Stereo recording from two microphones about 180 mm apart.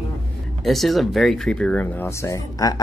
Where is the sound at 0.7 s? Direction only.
Centre (ahead or behind).